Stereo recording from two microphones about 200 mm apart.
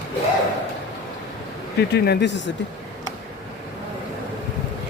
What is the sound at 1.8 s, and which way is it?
Speech, 55° left (ahead or behind).